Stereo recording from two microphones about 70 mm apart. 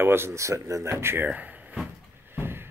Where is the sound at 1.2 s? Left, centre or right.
Right.